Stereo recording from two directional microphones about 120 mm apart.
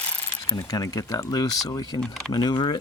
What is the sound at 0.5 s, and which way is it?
Speech, 30° left (ahead or behind).